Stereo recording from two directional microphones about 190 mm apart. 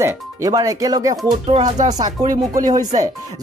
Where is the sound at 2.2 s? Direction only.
45° right (ahead or behind).